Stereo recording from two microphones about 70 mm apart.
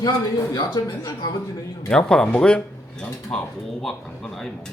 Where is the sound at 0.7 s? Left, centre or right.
Left.